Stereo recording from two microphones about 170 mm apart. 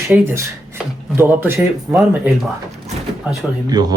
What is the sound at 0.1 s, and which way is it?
Speech, 10° right (ahead or behind).